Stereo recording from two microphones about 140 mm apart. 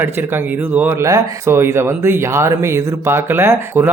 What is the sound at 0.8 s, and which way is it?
Speech, 15° right (ahead or behind).